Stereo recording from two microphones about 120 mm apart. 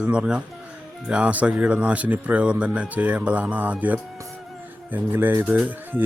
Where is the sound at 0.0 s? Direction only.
10° right (ahead or behind).